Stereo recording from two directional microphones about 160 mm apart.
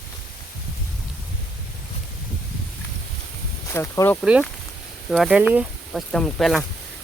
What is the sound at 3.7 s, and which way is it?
Speech, 15° left (ahead or behind).